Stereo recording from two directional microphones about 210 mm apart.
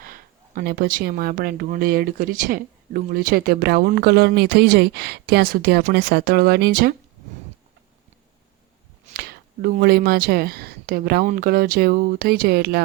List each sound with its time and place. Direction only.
0.0 s speech: 45° right (ahead or behind)
9.1 s speech: 45° right (ahead or behind)